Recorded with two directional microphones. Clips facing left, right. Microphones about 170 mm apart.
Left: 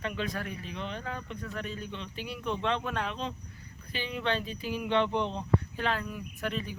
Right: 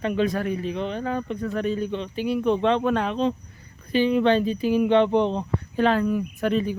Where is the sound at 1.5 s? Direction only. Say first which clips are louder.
Right 13 dB; 25° right (ahead or behind).